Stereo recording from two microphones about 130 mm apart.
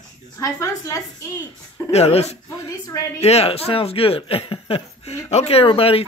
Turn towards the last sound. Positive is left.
turn(degrees=45)  # may be behind; listen again after turning